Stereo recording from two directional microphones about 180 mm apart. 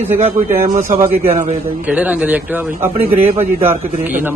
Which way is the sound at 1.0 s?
10° right (ahead or behind).